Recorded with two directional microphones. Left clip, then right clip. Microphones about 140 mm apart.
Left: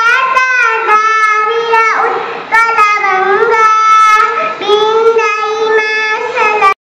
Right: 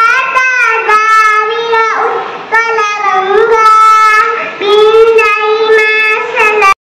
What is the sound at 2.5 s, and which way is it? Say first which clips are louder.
Child singing: left 2 dB; 20° right (ahead or behind).